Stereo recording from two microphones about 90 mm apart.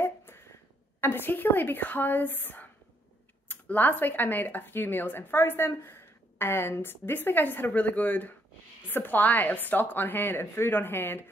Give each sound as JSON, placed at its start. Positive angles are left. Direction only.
{"t": 1.0, "sound": "speech", "side_deg": 25}